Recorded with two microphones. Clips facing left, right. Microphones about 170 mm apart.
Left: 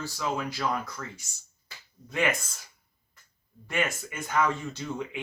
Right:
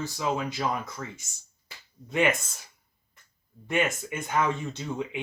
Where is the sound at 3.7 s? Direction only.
20° right (ahead or behind).